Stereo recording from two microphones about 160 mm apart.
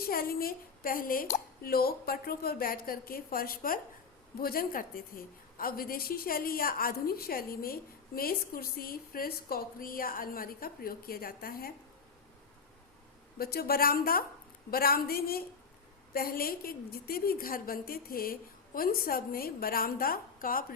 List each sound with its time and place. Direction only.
0.0 s a woman's voice: 70° left (ahead or behind)
13.4 s a woman's voice: 70° left (ahead or behind)